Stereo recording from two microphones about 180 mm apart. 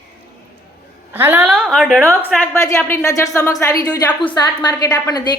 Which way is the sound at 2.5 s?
15° left (ahead or behind).